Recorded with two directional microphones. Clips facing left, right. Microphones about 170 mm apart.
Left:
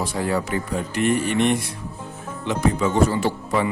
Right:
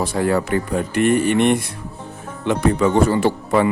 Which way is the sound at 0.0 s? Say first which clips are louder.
Right 5 dB; 60° right (ahead or behind).